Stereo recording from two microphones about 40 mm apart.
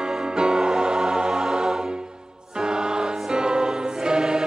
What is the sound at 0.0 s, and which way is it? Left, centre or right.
Music, centre.